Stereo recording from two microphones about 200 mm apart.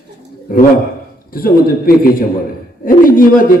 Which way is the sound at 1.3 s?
45° left (ahead or behind).